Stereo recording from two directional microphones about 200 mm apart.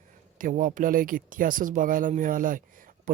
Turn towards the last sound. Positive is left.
turn(degrees=-40)  # may be behind; listen again after turning